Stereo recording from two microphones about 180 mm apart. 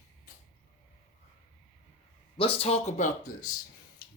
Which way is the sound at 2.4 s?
30° left (ahead or behind).